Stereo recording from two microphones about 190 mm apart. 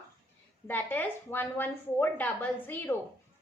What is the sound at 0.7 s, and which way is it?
A woman's voice, 10° left (ahead or behind).